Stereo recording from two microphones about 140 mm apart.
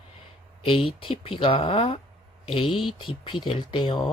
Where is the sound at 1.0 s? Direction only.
40° left (ahead or behind).